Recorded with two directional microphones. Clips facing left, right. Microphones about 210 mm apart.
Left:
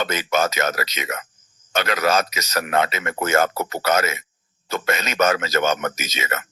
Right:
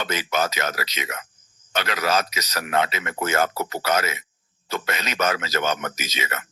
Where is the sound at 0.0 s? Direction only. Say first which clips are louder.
Left 3 dB; 50° left (ahead or behind).